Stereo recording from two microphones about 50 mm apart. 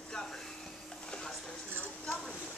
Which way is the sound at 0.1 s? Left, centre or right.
Centre.